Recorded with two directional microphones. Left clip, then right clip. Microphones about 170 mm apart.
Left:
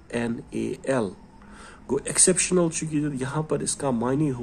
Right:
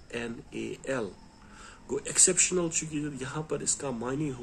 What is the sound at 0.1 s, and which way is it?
Speech, 40° left (ahead or behind).